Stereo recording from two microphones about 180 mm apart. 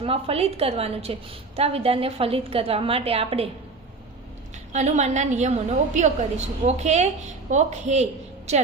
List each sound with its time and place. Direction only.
0.0 s a woman's voice: 35° right (ahead or behind)
4.7 s a woman's voice: 40° right (ahead or behind)